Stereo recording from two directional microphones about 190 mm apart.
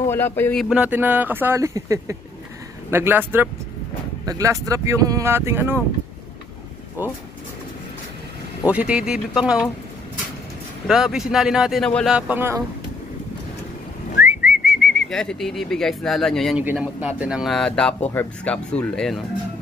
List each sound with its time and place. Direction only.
0.0 s speech: 10° left (ahead or behind)
0.7 s speech: 10° right (ahead or behind)
7.0 s speech: 10° right (ahead or behind)
8.6 s speech: 5° right (ahead or behind)
10.9 s speech: centre (ahead or behind)
14.2 s speech: 5° right (ahead or behind)